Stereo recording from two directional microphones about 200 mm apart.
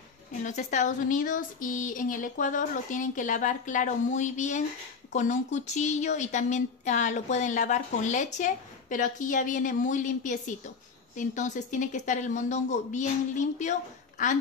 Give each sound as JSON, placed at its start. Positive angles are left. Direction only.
{"t": 0.4, "sound": "a woman's voice", "side_deg": 35}